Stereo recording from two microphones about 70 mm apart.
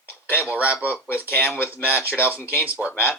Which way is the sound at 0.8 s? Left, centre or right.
Left.